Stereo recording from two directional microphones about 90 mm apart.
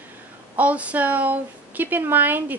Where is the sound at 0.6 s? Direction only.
15° right (ahead or behind).